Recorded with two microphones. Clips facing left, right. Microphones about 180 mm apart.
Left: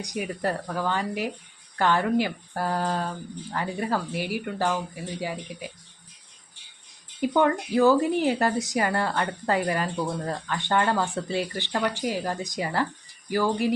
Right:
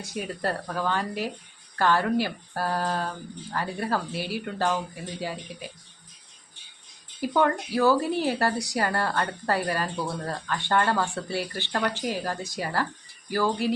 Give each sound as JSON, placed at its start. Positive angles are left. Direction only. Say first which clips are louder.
{"t": 0.0, "sound": "a woman's voice", "louder": "left 2 dB", "side_deg": 15}
{"t": 7.2, "sound": "a woman's voice", "louder": "left 2 dB", "side_deg": 20}